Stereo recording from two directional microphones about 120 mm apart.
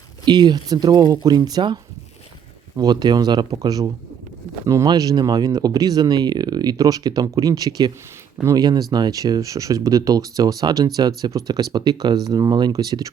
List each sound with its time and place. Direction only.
0.3 s speech: 35° right (ahead or behind)